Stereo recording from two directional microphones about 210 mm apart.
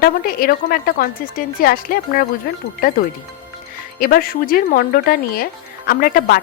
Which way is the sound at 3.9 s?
45° left (ahead or behind).